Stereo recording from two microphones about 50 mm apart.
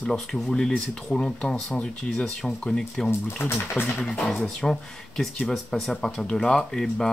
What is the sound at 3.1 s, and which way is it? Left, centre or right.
Speech, left.